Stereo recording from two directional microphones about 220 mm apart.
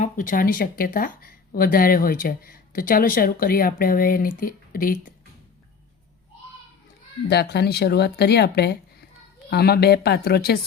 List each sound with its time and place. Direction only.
0.0 s speech: 35° left (ahead or behind)
7.3 s speech: 50° left (ahead or behind)